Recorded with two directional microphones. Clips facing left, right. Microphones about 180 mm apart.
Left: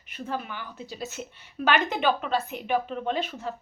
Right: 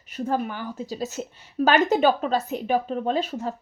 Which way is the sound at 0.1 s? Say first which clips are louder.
Right 7 dB; 45° right (ahead or behind).